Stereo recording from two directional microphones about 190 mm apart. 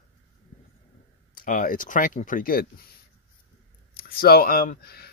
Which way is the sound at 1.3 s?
45° left (ahead or behind).